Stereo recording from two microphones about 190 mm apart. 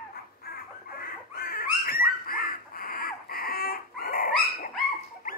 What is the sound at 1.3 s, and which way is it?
Dog, 50° left (ahead or behind).